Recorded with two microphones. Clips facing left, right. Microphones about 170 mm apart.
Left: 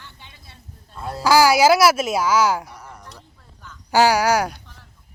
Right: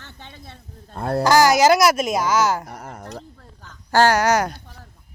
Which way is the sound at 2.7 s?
55° right (ahead or behind).